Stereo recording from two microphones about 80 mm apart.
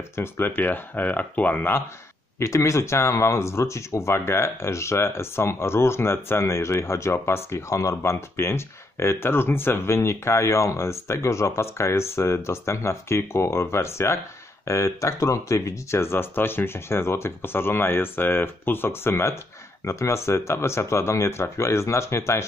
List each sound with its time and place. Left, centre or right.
0.1 s speech: left
2.3 s speech: left